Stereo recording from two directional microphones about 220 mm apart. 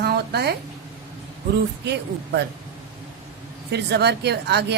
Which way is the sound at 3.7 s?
50° right (ahead or behind).